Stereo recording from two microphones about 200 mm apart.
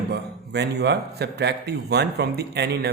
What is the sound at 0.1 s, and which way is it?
A man's voice, 55° right (ahead or behind).